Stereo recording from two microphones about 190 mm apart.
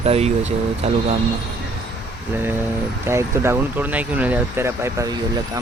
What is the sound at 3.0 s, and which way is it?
Speech, 15° right (ahead or behind).